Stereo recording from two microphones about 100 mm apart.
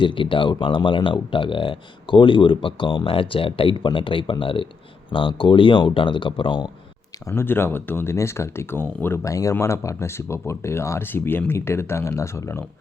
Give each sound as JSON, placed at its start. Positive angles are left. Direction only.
{"t": 0.0, "sound": "speech", "side_deg": 60}
{"t": 7.3, "sound": "speech", "side_deg": 25}
{"t": 9.2, "sound": "speech", "side_deg": 30}